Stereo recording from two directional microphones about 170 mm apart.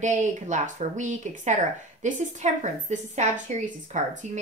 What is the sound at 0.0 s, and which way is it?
Speech, 45° right (ahead or behind).